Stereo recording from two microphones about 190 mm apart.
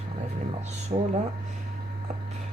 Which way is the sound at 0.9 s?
30° right (ahead or behind).